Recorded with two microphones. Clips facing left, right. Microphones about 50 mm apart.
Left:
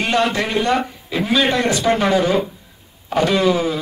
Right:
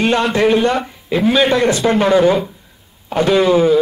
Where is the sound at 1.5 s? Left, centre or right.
Right.